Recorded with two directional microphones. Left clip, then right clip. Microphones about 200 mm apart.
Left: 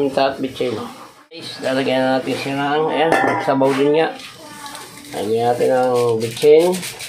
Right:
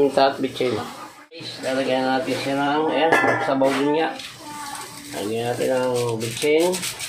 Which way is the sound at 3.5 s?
30° left (ahead or behind).